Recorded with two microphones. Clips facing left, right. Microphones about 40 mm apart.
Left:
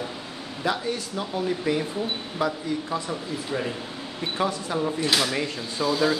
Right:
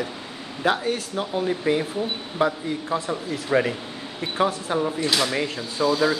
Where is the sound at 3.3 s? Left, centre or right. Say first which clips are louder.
Right 9 dB; right.